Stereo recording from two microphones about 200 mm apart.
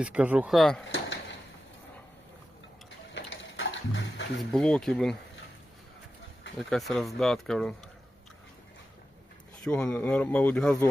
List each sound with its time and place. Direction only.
0.0 s speech: 5° right (ahead or behind)
0.9 s a sound: 70° left (ahead or behind)
3.2 s music: 70° left (ahead or behind)
4.4 s speech: 5° left (ahead or behind)
6.7 s speech: centre (ahead or behind)
9.6 s speech: 5° left (ahead or behind)